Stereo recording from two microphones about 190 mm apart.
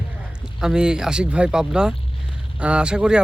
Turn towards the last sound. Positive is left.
turn(degrees=-5)  # may be behind; listen again after turning